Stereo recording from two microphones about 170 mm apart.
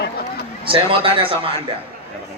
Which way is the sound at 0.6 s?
30° right (ahead or behind).